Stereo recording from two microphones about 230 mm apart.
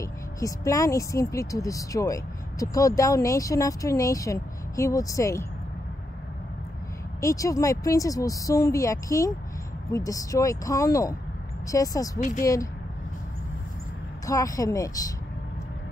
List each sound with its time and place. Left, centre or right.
0.0 s speech: centre
7.2 s speech: centre
12.2 s speech: left
14.2 s speech: centre